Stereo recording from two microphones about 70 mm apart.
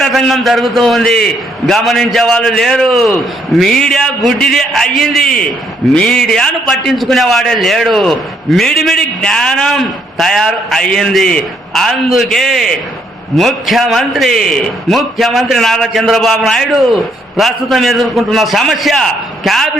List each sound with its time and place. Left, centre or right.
0.0 s a man's voice: centre